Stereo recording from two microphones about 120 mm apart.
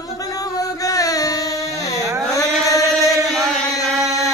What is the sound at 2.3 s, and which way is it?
Chant, 30° left (ahead or behind).